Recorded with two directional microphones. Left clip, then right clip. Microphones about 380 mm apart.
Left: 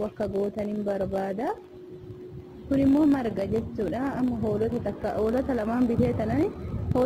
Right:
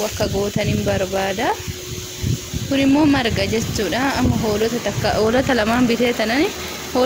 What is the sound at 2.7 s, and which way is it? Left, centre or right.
Speech, left.